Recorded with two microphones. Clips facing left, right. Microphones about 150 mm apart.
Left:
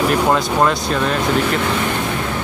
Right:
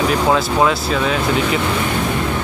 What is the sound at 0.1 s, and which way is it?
Speech, centre (ahead or behind).